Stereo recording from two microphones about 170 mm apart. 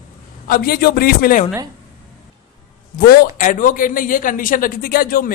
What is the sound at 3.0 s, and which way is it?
Speech, 55° left (ahead or behind).